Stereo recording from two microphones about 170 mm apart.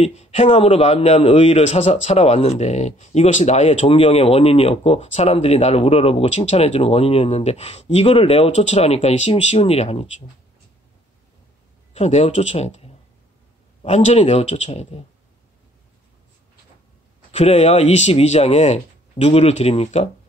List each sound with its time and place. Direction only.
0.0 s a man's voice: 40° left (ahead or behind)
11.9 s a man's voice: 40° left (ahead or behind)
17.3 s a man's voice: 35° left (ahead or behind)